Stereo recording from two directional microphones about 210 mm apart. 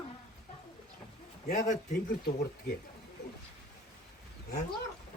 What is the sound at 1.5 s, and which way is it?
Speech, 40° left (ahead or behind).